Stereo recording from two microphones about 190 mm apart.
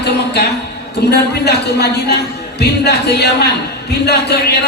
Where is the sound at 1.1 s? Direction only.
60° left (ahead or behind).